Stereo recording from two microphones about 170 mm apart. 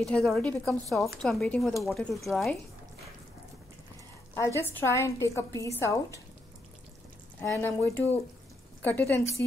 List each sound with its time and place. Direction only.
0.0 s a woman's voice: centre (ahead or behind)
4.3 s a woman's voice: 15° left (ahead or behind)
7.3 s a woman's voice: 15° left (ahead or behind)